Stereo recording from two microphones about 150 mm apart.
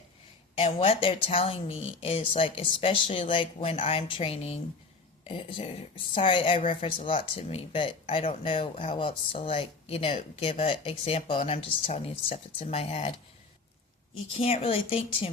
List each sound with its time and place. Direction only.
0.5 s speech: 40° left (ahead or behind)
14.3 s speech: 40° left (ahead or behind)